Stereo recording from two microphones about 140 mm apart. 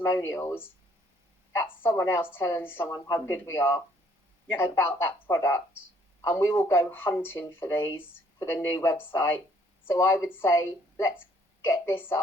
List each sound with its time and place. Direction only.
0.0 s a woman's voice: 20° left (ahead or behind)